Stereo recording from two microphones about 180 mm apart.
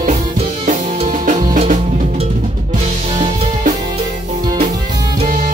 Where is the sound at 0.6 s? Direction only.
45° right (ahead or behind).